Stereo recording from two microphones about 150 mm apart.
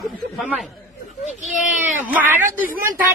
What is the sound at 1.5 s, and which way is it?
Speech, 10° right (ahead or behind).